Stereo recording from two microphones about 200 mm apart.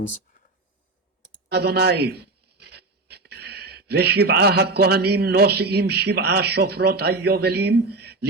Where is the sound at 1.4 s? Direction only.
55° right (ahead or behind).